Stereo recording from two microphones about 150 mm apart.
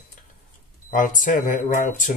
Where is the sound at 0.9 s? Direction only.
60° left (ahead or behind).